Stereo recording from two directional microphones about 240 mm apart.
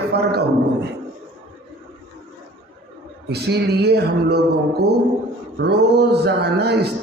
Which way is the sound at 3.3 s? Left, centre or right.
Right.